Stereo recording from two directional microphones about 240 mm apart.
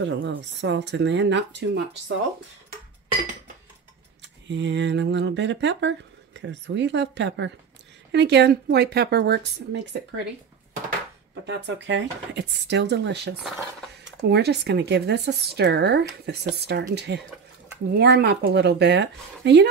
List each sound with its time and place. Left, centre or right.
0.0 s speech: right
4.5 s speech: right
11.4 s speech: right
13.4 s speech: centre
14.0 s speech: right